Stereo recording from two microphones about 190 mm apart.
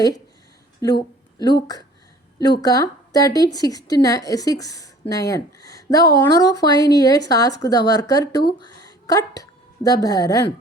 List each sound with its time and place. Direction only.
0.8 s a woman's voice: 20° left (ahead or behind)